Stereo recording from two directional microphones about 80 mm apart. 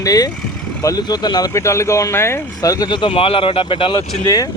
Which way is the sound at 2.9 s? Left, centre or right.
Left.